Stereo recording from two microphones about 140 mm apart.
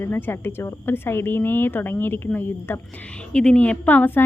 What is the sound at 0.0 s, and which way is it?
Speech, 15° left (ahead or behind).